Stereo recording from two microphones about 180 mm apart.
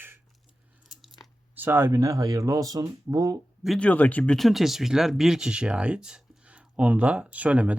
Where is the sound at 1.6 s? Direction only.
10° right (ahead or behind).